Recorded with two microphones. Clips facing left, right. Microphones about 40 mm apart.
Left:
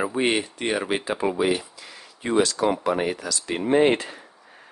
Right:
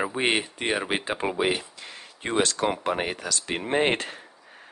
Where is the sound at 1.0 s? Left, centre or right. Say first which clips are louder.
Left 4 dB; right.